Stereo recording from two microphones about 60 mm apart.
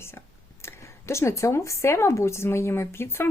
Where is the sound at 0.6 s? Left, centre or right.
Left.